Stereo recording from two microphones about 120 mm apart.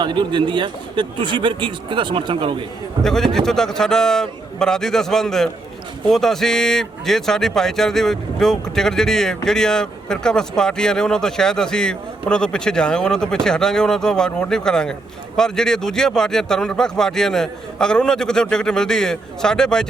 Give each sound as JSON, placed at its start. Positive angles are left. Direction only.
{"t": 0.0, "sound": "a man's voice", "side_deg": -40}
{"t": 3.0, "sound": "speech", "side_deg": 5}